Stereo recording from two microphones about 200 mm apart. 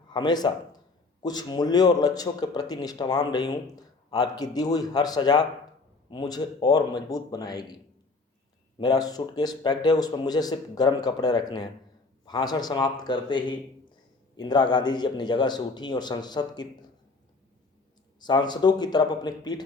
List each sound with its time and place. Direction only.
0.1 s speech: 20° left (ahead or behind)
8.8 s speech: 20° left (ahead or behind)
18.2 s speech: 20° left (ahead or behind)